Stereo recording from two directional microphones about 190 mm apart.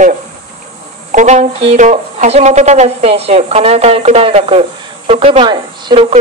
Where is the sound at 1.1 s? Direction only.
35° right (ahead or behind).